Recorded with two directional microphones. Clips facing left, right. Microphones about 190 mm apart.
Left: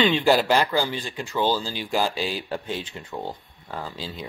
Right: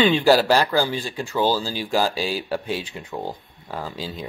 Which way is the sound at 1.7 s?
20° left (ahead or behind).